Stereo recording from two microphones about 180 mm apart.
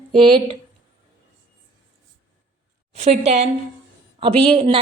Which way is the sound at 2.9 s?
40° right (ahead or behind).